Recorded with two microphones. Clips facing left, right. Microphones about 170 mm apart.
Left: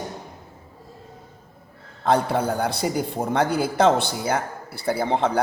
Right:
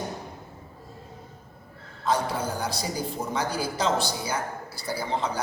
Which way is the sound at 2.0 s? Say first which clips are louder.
Left 6 dB; 60° left (ahead or behind).